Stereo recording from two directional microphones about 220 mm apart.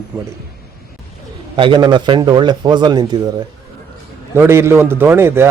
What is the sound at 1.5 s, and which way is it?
Speech, 20° right (ahead or behind).